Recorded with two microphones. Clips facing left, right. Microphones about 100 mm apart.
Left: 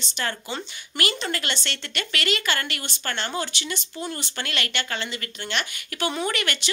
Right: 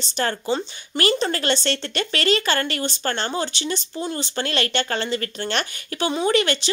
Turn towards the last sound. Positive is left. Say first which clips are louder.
# right 7 dB
turn(degrees=-30)  # may be behind; listen again after turning